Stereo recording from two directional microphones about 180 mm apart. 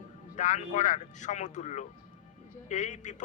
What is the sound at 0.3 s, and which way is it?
A man's voice, 45° left (ahead or behind).